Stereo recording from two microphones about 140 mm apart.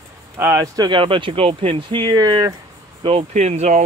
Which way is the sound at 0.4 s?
15° right (ahead or behind).